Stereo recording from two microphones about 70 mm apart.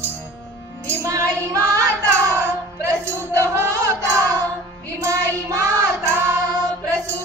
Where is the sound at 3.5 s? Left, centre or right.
Right.